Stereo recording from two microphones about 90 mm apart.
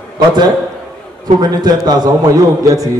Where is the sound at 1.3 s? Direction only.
50° right (ahead or behind).